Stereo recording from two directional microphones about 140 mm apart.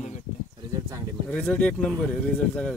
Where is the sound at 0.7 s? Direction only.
25° right (ahead or behind).